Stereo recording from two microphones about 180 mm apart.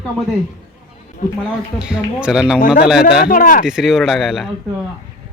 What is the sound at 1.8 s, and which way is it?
Speech, 5° right (ahead or behind).